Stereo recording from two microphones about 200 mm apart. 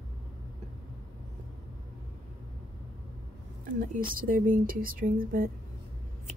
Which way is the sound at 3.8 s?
45° right (ahead or behind).